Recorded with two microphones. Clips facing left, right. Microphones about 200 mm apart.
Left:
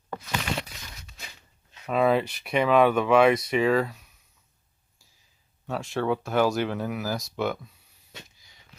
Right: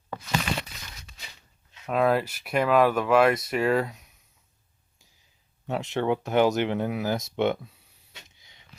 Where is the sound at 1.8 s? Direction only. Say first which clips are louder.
Left 1 dB; centre (ahead or behind).